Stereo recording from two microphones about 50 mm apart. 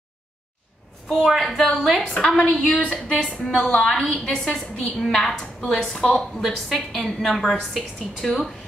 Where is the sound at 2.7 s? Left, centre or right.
Left.